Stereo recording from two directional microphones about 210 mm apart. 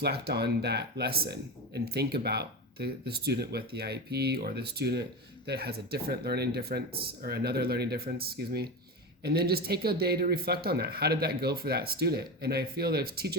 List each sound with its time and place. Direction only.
0.0 s speech: 50° right (ahead or behind)